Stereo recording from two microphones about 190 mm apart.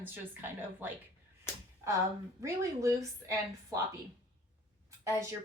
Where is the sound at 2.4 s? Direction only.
15° right (ahead or behind).